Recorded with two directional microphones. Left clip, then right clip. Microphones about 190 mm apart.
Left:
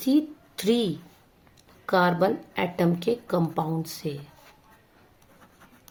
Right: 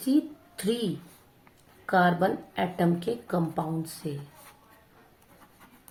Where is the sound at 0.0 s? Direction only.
60° left (ahead or behind).